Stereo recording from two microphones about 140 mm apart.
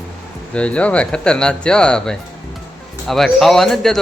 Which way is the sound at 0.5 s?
10° left (ahead or behind).